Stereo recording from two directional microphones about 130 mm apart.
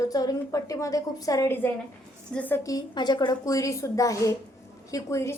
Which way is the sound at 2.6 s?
25° left (ahead or behind).